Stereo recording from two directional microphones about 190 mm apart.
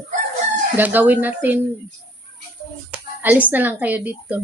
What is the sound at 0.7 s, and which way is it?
Speech, 10° right (ahead or behind).